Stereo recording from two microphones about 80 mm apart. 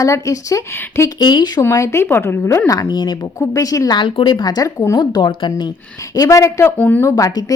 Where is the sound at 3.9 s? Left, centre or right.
Left.